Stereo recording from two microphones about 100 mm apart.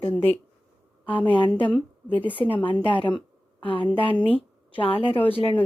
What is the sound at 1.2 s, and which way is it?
A woman's voice, 55° left (ahead or behind).